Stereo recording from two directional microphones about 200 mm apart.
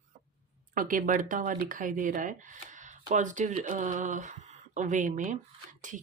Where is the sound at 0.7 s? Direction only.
45° right (ahead or behind).